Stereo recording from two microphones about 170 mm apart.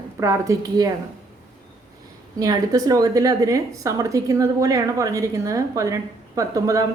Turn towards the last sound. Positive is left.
turn(degrees=-20)  # may be behind; listen again after turning